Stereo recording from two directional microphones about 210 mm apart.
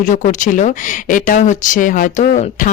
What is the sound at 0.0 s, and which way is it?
Speech, 35° left (ahead or behind).